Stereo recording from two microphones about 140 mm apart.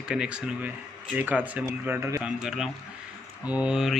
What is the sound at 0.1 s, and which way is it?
A man's voice, 5° right (ahead or behind).